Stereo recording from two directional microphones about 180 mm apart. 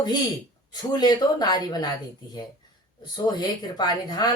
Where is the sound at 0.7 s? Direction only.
25° left (ahead or behind).